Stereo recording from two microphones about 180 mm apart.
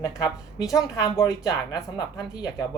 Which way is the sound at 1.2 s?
20° left (ahead or behind).